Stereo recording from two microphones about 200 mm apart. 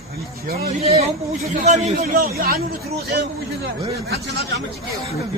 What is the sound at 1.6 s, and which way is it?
Speech, 35° right (ahead or behind).